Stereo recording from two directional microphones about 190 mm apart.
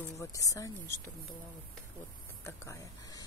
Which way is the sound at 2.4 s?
15° left (ahead or behind).